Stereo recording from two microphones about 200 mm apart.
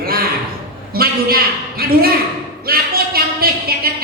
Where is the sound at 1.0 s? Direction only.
50° right (ahead or behind).